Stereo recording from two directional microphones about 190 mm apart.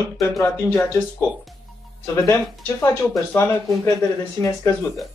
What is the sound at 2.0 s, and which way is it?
Speech, 15° left (ahead or behind).